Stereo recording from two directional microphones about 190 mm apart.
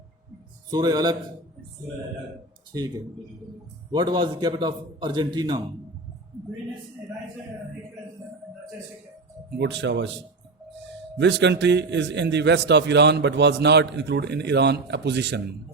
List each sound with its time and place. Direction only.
0.7 s a man's voice: 20° right (ahead or behind)
2.7 s a man's voice: 20° right (ahead or behind)
3.9 s a man's voice: 25° right (ahead or behind)
9.6 s speech: 70° right (ahead or behind)
11.2 s a man's voice: 70° right (ahead or behind)